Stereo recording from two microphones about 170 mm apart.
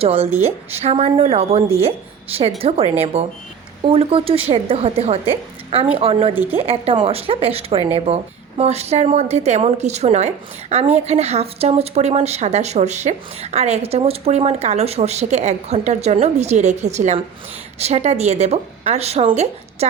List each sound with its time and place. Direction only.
0.0 s a woman's voice: 35° right (ahead or behind)
0.3 s a woman's voice: 15° right (ahead or behind)
0.7 s a woman's voice: 35° right (ahead or behind)
6.3 s a woman's voice: 10° right (ahead or behind)
6.6 s a woman's voice: 35° right (ahead or behind)